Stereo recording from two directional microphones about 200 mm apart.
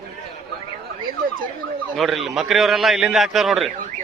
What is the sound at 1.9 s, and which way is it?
A man's voice, centre (ahead or behind).